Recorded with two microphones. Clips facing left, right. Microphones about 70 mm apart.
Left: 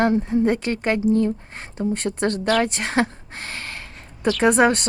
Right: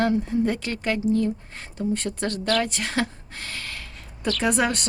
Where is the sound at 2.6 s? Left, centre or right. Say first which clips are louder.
Left 4 dB; left.